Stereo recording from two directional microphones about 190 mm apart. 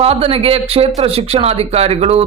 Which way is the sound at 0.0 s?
30° right (ahead or behind).